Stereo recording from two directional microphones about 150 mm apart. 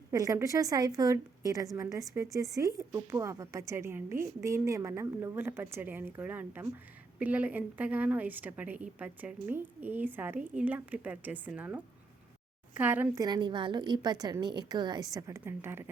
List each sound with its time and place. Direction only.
0.1 s a woman's voice: 20° right (ahead or behind)
13.1 s a woman's voice: 30° right (ahead or behind)